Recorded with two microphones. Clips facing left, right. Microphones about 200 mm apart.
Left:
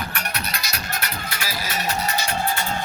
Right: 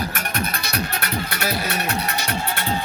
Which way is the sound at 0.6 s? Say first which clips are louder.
Right 4 dB; 60° right (ahead or behind).